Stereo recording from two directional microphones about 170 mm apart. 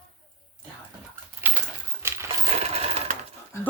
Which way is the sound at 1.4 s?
15° right (ahead or behind).